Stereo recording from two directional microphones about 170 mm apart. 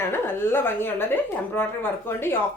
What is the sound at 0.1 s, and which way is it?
A woman's voice, 15° left (ahead or behind).